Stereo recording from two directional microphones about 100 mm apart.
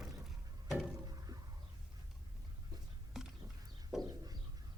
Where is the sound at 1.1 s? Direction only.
40° right (ahead or behind).